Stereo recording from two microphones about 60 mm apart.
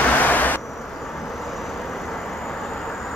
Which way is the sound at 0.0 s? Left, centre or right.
Left.